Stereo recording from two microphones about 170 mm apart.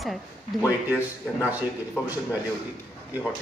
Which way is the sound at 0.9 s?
15° left (ahead or behind).